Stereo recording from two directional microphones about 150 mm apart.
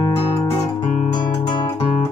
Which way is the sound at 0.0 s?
20° left (ahead or behind).